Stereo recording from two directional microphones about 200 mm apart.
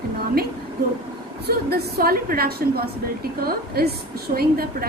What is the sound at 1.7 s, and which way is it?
A woman's voice, 50° right (ahead or behind).